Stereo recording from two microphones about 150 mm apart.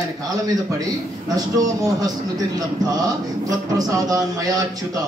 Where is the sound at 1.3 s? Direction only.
25° right (ahead or behind).